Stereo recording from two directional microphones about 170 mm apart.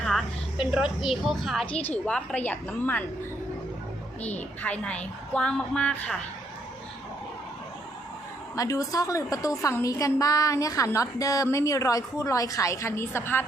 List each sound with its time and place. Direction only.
0.0 s music: centre (ahead or behind)
0.7 s a woman's voice: 5° right (ahead or behind)
4.2 s a woman's voice: 10° left (ahead or behind)
8.5 s a woman's voice: 20° left (ahead or behind)